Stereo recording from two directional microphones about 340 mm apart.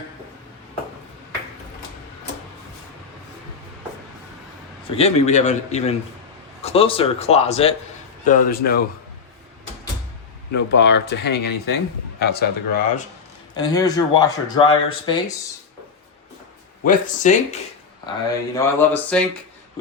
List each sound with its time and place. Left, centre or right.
4.9 s speech: centre
10.5 s speech: left
13.6 s speech: centre
16.8 s speech: left
18.0 s speech: centre